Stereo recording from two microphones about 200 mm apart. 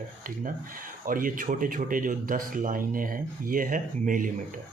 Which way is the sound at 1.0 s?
45° right (ahead or behind).